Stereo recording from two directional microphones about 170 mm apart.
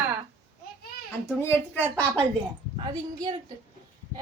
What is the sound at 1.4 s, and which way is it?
Speech, 15° left (ahead or behind).